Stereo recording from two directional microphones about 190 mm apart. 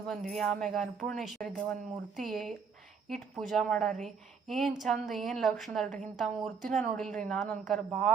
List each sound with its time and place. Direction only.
0.1 s a woman's voice: centre (ahead or behind)